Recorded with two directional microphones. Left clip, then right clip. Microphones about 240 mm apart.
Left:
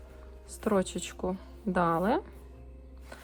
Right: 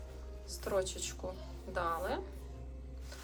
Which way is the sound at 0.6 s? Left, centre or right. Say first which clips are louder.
Left 6 dB; left.